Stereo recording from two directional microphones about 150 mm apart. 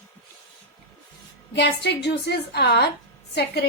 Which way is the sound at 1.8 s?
90° left.